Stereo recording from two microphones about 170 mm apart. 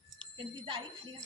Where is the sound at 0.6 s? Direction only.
30° right (ahead or behind).